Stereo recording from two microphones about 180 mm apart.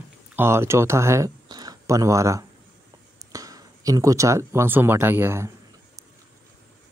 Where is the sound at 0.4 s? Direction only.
15° right (ahead or behind).